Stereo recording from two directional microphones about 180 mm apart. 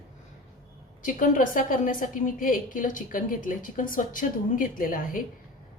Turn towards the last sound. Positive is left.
turn(degrees=50)  # may be behind; listen again after turning